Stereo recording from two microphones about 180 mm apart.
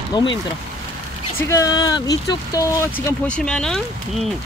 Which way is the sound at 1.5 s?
20° left (ahead or behind).